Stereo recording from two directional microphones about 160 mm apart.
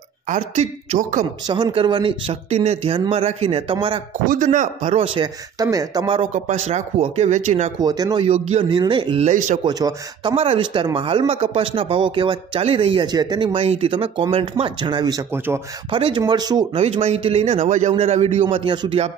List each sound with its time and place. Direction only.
0.3 s speech: 50° right (ahead or behind)
1.5 s speech: 30° right (ahead or behind)
4.3 s speech: 55° right (ahead or behind); by 6.2 s 30° right (ahead or behind)
6.3 s speech: 45° right (ahead or behind)
7.8 s speech: 25° right (ahead or behind)
8.3 s speech: 45° right (ahead or behind)
8.6 s speech: 30° right (ahead or behind)
9.3 s speech: 55° right (ahead or behind)
9.7 s speech: 25° right (ahead or behind)
10.3 s speech: 35° right (ahead or behind); by 15.6 s 15° right (ahead or behind)
15.9 s speech: 30° right (ahead or behind)
16.7 s speech: 40° right (ahead or behind)
18.5 s speech: 30° right (ahead or behind)